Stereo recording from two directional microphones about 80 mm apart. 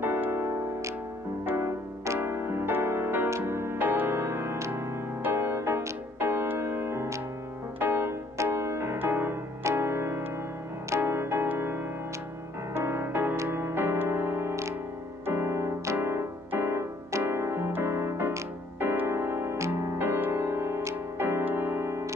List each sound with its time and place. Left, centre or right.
0.0 s music: right
1.4 s piano: right
3.3 s music: right
9.7 s keyboard: right
11.0 s music: right
15.2 s keyboard: right
19.8 s music: right